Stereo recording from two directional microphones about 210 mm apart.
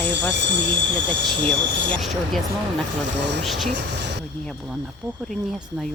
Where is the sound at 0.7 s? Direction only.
5° left (ahead or behind).